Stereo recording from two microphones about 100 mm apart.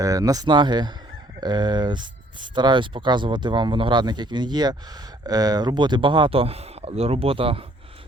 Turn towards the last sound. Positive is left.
turn(degrees=-65)  # may be behind; listen again after turning